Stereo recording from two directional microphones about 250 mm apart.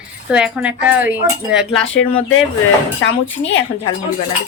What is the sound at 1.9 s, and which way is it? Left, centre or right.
Speech, left.